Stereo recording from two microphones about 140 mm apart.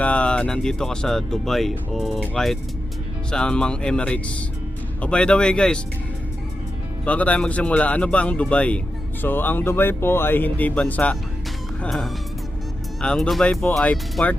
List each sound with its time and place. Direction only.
0.0 s speech: 10° left (ahead or behind)
7.0 s speech: 10° left (ahead or behind)